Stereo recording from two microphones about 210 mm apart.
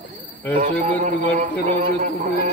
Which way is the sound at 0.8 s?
35° right (ahead or behind).